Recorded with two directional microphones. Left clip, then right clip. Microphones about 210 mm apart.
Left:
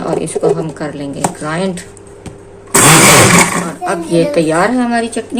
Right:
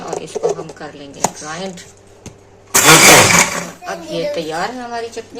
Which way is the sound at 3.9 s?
35° left (ahead or behind).